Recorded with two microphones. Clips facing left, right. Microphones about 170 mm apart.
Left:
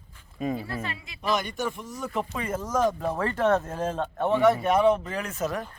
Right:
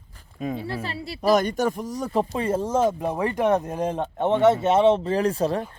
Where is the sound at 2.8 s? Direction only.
15° right (ahead or behind).